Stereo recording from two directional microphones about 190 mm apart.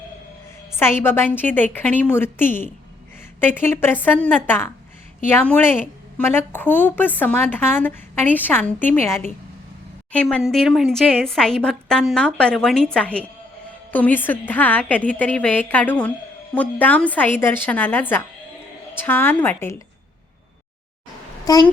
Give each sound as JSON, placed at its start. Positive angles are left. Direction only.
{"t": 0.7, "sound": "a woman's voice", "side_deg": 10}
{"t": 10.1, "sound": "a woman's voice", "side_deg": 5}
{"t": 21.4, "sound": "a child's voice", "side_deg": 20}